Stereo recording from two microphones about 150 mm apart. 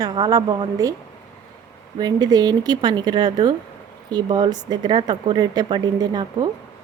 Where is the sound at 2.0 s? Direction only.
25° right (ahead or behind).